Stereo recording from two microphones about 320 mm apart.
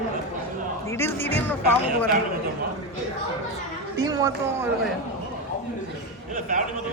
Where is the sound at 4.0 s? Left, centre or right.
Centre.